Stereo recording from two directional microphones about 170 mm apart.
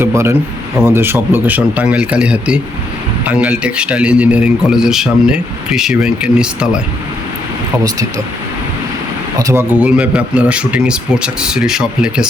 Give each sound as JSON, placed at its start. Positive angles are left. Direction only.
{"t": 0.0, "sound": "speech", "side_deg": -15}
{"t": 9.4, "sound": "speech", "side_deg": -15}